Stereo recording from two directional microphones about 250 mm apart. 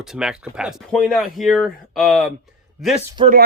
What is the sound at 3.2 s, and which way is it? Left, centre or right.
Speech, right.